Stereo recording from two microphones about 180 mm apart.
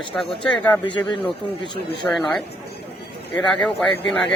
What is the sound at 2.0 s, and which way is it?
Speech, 10° left (ahead or behind).